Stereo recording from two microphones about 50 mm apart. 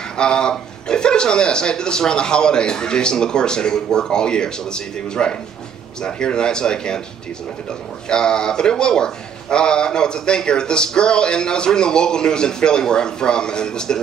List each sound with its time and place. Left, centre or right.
0.2 s a man's voice: centre
8.1 s a man's voice: centre